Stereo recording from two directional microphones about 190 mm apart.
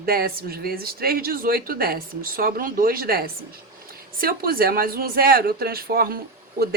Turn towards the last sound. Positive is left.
turn(degrees=-50)  # may be behind; listen again after turning